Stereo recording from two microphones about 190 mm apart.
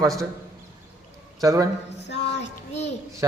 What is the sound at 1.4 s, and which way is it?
Speech, 15° right (ahead or behind).